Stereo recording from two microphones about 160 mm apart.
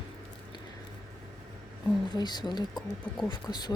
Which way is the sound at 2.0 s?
25° left (ahead or behind).